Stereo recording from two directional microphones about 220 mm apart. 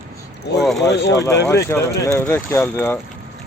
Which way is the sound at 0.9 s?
50° left (ahead or behind).